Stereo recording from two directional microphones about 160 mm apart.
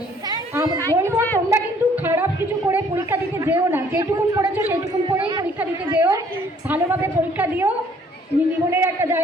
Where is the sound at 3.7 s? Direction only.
20° right (ahead or behind).